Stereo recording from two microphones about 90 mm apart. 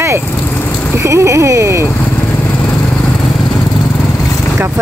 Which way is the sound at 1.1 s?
35° right (ahead or behind).